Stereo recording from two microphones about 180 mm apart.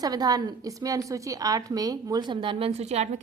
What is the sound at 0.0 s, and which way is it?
A woman's voice, 20° right (ahead or behind).